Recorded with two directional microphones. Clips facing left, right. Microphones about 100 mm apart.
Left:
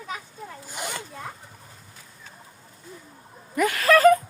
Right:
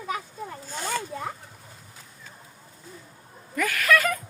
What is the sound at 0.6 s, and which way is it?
Zipper, 15° left (ahead or behind).